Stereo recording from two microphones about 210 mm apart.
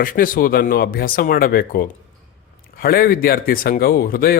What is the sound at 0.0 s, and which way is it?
Speech, 40° left (ahead or behind).